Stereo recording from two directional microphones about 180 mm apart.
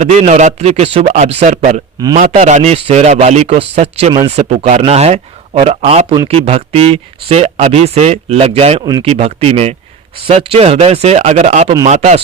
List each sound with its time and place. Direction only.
0.0 s speech: 40° right (ahead or behind)